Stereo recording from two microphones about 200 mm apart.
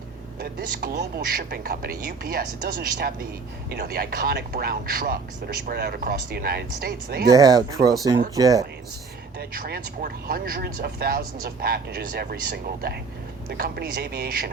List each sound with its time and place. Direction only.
0.3 s speech: 50° right (ahead or behind)
7.3 s speech: 15° right (ahead or behind)
9.4 s speech: 50° right (ahead or behind)